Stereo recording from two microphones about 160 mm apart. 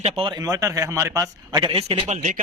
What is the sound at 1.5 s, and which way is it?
Speech, 30° right (ahead or behind).